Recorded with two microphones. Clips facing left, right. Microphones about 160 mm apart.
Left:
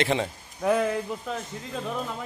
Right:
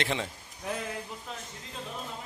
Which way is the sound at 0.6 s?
85° left.